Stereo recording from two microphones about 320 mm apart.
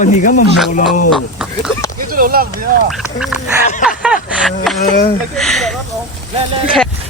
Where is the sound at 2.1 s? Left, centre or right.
Right.